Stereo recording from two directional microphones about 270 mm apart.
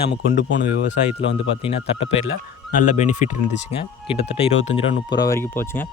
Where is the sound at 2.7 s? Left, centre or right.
Left.